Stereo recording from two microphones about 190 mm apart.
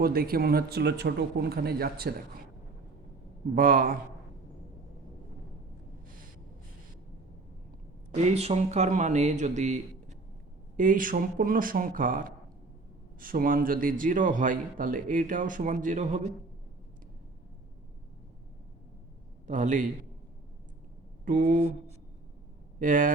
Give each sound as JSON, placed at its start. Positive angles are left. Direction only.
{"t": 0.0, "sound": "speech", "side_deg": -50}
{"t": 3.5, "sound": "a man's voice", "side_deg": -50}
{"t": 8.1, "sound": "a man's voice", "side_deg": -35}
{"t": 19.5, "sound": "speech", "side_deg": -40}
{"t": 21.2, "sound": "a man's voice", "side_deg": -45}
{"t": 22.8, "sound": "a man's voice", "side_deg": -45}